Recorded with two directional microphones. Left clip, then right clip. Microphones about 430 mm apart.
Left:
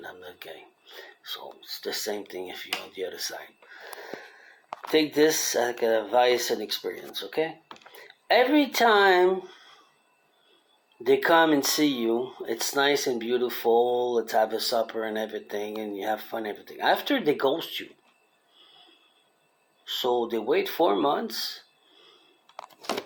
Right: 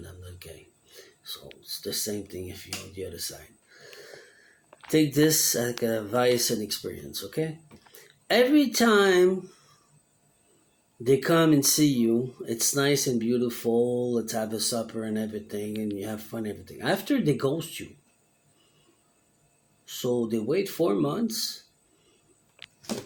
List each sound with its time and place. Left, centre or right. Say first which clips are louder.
1.6 s speech: even; centre
4.9 s speech: left 1 dB; centre
11.0 s speech: left 2 dB; centre
20.0 s speech: left 2 dB; centre